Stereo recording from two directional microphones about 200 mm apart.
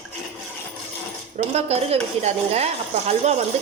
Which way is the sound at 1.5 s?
30° right (ahead or behind).